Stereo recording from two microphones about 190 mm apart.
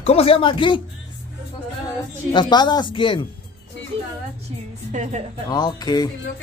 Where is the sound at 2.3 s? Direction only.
25° left (ahead or behind).